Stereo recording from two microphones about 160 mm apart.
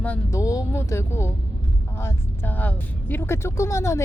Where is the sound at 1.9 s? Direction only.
15° left (ahead or behind).